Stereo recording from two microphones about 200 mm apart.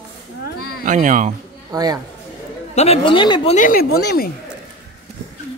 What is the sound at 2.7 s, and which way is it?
Speech, 30° left (ahead or behind).